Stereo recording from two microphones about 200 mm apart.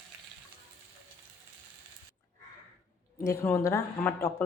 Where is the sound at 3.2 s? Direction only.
15° left (ahead or behind).